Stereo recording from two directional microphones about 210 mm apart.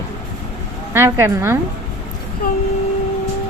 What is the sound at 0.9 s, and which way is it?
Speech, 10° right (ahead or behind).